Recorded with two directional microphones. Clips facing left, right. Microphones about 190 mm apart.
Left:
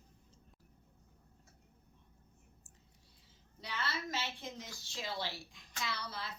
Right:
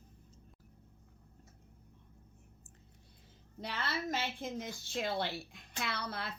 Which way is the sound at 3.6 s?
55° right (ahead or behind).